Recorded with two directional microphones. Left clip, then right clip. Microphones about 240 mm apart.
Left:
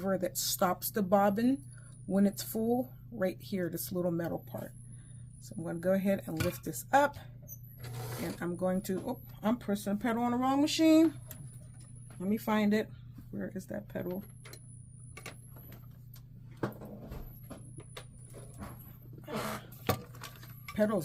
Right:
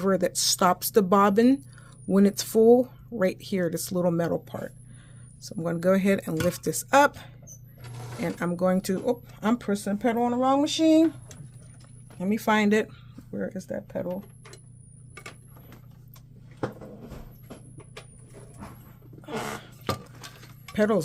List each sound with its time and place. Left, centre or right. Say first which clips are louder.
0.0 s speech: right 9 dB; right
8.4 s speech: right 9 dB; right; by 11.0 s centre
12.2 s speech: right 8 dB; right
13.3 s speech: right 8 dB; right
20.7 s speech: right 7 dB; right